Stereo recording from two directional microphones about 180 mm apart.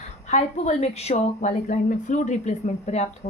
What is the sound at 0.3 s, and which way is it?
A woman's voice, 40° left (ahead or behind).